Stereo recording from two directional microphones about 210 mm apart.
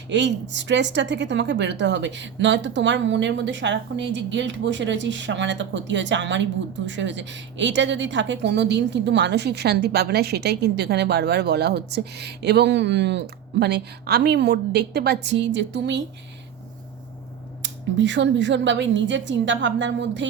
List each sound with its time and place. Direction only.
0.1 s a woman's voice: 55° right (ahead or behind)
17.6 s a woman's voice: 60° right (ahead or behind)